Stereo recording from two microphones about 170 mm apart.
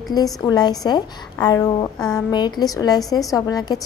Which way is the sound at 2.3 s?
25° left (ahead or behind).